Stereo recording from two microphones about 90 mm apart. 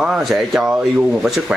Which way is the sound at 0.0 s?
5° right (ahead or behind).